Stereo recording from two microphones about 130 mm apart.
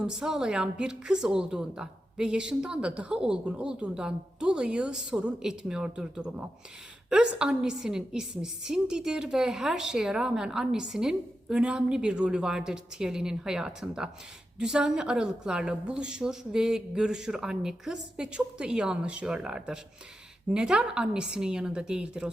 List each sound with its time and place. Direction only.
0.0 s a woman's voice: 5° right (ahead or behind)